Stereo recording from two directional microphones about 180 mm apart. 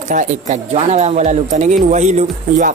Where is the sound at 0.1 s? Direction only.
45° right (ahead or behind).